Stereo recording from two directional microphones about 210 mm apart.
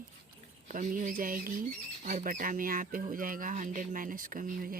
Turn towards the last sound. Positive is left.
turn(degrees=-40)  # may be behind; listen again after turning